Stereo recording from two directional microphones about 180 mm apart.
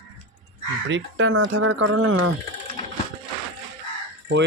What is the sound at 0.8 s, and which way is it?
Speech, 90° right.